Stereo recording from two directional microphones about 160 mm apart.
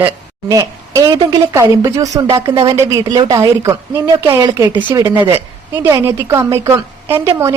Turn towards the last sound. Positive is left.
turn(degrees=-15)  # may be behind; listen again after turning